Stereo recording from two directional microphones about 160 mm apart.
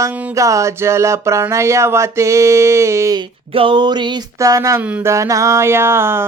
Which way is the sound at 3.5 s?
30° right (ahead or behind).